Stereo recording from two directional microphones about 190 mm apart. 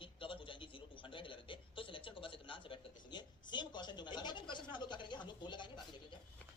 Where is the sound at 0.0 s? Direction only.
25° left (ahead or behind).